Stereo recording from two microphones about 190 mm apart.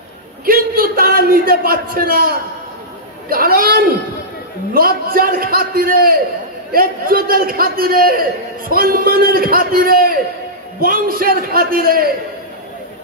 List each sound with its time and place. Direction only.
0.5 s a man's voice: 50° right (ahead or behind)